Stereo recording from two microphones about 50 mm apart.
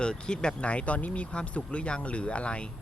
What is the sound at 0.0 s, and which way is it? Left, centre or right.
Speech, centre.